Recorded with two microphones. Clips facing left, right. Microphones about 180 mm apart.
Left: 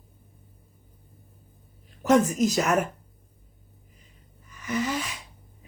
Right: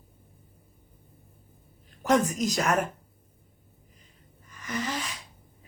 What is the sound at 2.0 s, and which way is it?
Speech, centre (ahead or behind).